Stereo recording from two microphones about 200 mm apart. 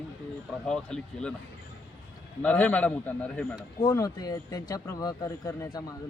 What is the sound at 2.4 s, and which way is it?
Speech, 10° left (ahead or behind).